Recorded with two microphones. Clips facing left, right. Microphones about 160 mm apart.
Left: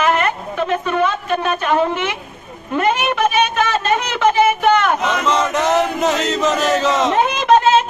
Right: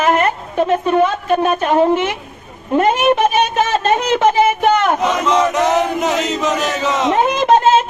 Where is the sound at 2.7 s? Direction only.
30° right (ahead or behind).